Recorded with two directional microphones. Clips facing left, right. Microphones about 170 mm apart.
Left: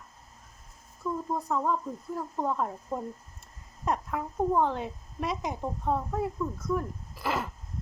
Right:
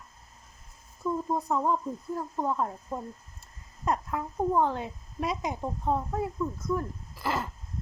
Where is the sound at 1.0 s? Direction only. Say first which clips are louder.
Right 2 dB; 20° right (ahead or behind).